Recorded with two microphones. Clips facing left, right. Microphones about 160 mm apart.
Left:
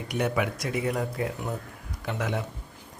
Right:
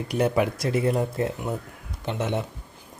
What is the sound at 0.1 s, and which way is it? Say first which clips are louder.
Speech: right 4 dB; 35° right (ahead or behind).